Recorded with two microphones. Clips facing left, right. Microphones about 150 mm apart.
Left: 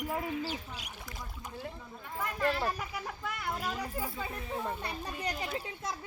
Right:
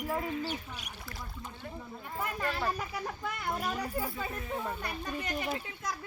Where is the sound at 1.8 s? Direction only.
10° right (ahead or behind).